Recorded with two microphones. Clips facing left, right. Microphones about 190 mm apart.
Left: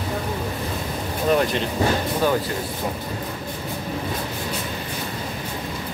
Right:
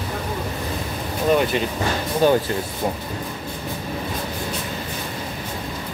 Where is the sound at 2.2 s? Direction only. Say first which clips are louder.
Right 5 dB; 25° right (ahead or behind).